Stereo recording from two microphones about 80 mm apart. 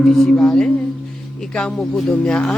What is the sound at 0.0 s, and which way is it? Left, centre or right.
Speech, centre.